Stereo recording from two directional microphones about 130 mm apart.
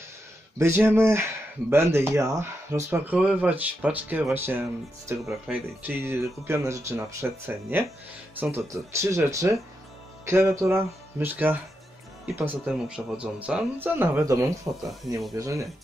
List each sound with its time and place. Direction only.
0.6 s speech: 20° right (ahead or behind)